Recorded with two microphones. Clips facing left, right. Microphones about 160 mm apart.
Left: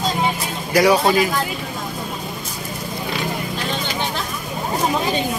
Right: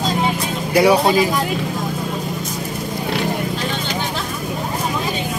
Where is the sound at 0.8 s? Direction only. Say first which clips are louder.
Right 1 dB; 15° right (ahead or behind).